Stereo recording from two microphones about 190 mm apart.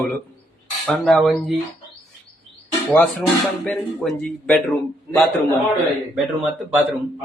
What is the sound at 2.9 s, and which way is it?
Speech, 5° left (ahead or behind).